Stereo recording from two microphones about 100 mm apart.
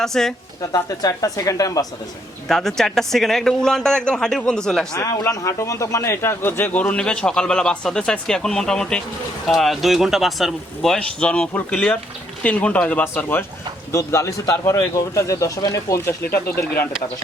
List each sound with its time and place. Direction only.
0.0 s speech: 5° left (ahead or behind)
0.6 s speech: 40° left (ahead or behind)
2.5 s speech: 5° left (ahead or behind)
5.3 s a man's voice: 30° left (ahead or behind)
13.9 s speech: 30° left (ahead or behind)